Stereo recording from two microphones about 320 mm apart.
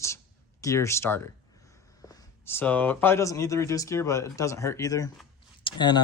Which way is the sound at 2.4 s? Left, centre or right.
Centre.